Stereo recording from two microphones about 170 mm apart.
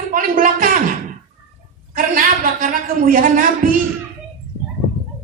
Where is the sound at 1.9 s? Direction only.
55° right (ahead or behind).